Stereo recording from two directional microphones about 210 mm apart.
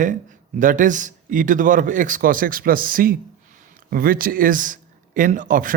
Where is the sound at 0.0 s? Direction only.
35° right (ahead or behind).